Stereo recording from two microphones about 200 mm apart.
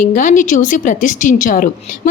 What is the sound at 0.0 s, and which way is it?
A woman's voice, 40° left (ahead or behind).